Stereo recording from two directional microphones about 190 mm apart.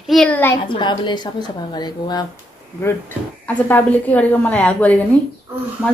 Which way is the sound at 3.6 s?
10° left (ahead or behind).